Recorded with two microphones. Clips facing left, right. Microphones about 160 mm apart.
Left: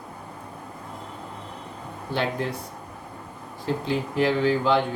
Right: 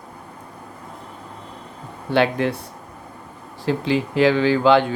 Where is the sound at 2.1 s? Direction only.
75° right (ahead or behind).